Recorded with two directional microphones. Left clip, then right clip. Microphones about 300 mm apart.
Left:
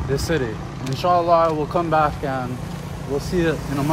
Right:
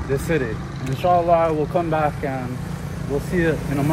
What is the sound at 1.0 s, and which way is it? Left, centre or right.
Speech, centre.